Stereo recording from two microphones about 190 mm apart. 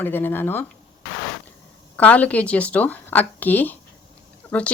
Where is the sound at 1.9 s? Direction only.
10° left (ahead or behind).